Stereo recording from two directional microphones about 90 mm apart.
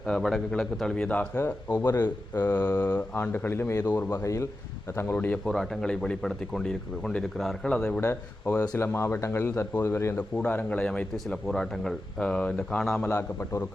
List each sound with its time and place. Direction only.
0.0 s speech: 5° left (ahead or behind)
1.7 s mantra: 45° left (ahead or behind)
3.2 s a man's voice: 25° left (ahead or behind)
3.8 s mantra: 45° left (ahead or behind)
4.2 s a man's voice: 35° left (ahead or behind)
5.5 s speech: 5° left (ahead or behind)
8.0 s speech: 35° left (ahead or behind)
8.9 s a man's voice: 25° left (ahead or behind)
10.2 s speech: 15° left (ahead or behind)
13.1 s a man's voice: 30° left (ahead or behind)